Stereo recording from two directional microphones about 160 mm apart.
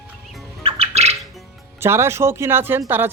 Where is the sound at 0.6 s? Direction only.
40° right (ahead or behind).